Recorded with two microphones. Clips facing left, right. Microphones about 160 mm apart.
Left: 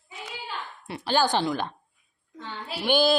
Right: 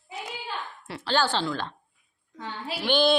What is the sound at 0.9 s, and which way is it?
Speech, 15° left (ahead or behind).